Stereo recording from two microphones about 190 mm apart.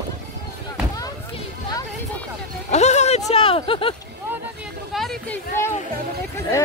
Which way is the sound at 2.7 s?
35° left (ahead or behind).